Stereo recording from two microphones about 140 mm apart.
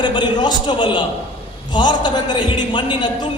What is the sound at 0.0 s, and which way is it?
A man's voice, 35° left (ahead or behind).